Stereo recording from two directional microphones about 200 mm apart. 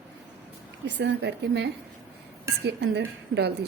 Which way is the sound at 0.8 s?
60° right (ahead or behind).